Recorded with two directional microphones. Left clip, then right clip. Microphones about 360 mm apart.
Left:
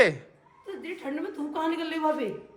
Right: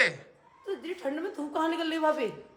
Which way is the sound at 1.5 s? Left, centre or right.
Centre.